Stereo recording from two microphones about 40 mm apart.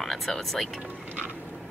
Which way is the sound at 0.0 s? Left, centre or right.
Centre.